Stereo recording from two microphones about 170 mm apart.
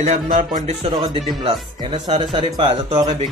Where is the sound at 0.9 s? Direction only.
30° right (ahead or behind).